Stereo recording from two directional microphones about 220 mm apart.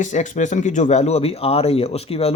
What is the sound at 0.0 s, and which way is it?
Speech, 35° left (ahead or behind).